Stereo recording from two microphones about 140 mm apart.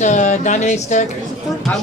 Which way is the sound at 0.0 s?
60° left (ahead or behind).